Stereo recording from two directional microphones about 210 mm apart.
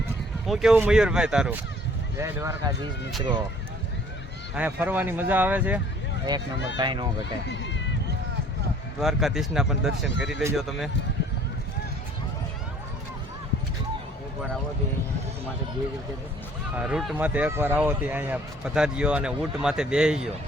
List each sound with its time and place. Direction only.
0.4 s speech: centre (ahead or behind)
2.1 s fowl: 10° right (ahead or behind)
4.5 s fowl: 10° right (ahead or behind)
6.3 s speech: 20° right (ahead or behind)
7.4 s speech: 55° left (ahead or behind)
9.0 s speech: centre (ahead or behind)
16.7 s speech: 5° right (ahead or behind)